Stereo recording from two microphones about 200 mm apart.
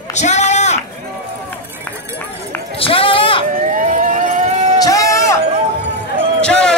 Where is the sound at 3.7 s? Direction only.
40° right (ahead or behind).